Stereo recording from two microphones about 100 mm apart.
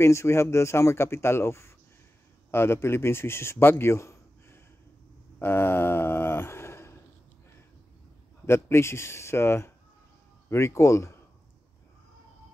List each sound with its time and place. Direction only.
0.0 s a man's voice: 30° left (ahead or behind)
5.4 s a sound: 25° left (ahead or behind)
8.5 s speech: 25° left (ahead or behind)